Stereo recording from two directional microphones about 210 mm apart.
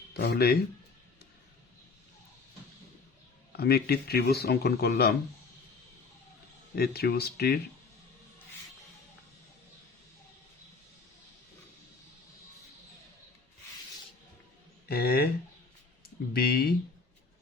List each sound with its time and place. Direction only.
0.1 s speech: 50° left (ahead or behind)
3.5 s speech: 50° left (ahead or behind)
6.7 s speech: 50° left (ahead or behind)
14.8 s speech: 50° left (ahead or behind)